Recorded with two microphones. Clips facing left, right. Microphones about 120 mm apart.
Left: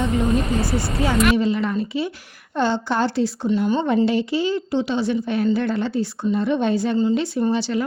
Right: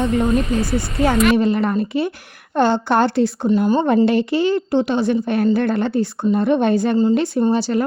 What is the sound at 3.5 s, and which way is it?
A woman's voice, 40° right (ahead or behind).